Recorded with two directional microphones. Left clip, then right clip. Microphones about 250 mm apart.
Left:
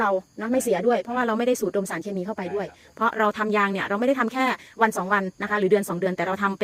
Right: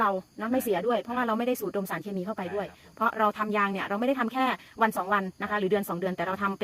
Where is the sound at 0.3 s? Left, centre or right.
Centre.